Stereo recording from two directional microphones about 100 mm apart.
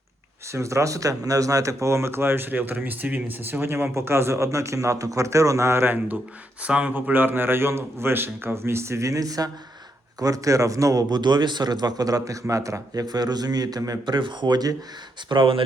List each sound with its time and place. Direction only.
0.5 s a man's voice: 30° right (ahead or behind)
14.0 s speech: 55° right (ahead or behind)
15.3 s speech: 55° right (ahead or behind)